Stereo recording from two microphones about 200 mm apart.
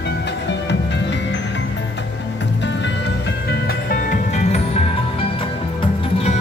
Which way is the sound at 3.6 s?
45° left (ahead or behind).